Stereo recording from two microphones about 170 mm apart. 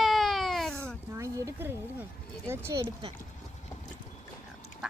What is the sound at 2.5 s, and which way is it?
Speech, 15° right (ahead or behind).